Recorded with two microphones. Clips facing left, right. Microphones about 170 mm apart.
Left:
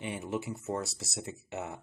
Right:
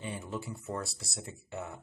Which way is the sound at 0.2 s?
20° left (ahead or behind).